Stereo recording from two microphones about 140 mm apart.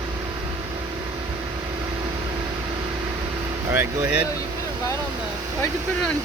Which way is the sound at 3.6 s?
20° right (ahead or behind).